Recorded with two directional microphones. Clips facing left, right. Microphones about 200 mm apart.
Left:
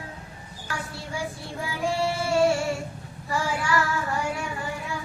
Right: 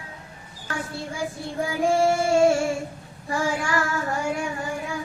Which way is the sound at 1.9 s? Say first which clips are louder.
Right 5 dB; 45° right (ahead or behind).